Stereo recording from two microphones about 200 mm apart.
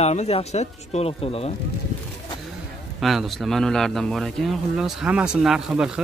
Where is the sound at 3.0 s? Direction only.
Centre (ahead or behind).